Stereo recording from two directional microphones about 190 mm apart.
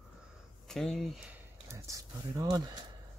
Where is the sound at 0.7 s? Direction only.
Centre (ahead or behind); by 2.8 s 20° right (ahead or behind).